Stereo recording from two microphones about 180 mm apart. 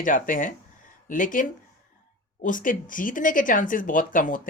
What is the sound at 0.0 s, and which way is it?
Speech, 50° left (ahead or behind).